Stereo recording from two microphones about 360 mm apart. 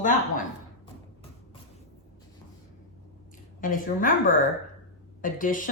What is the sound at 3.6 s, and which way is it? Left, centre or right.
A woman's voice, left.